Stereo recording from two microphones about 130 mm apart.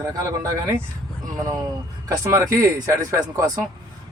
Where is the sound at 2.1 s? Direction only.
25° right (ahead or behind).